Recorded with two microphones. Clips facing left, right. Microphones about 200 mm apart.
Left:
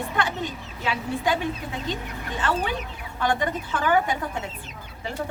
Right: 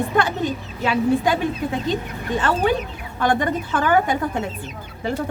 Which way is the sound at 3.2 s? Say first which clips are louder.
Right 5 dB; 50° right (ahead or behind).